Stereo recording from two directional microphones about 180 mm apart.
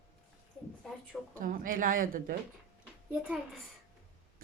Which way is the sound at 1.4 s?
50° right (ahead or behind).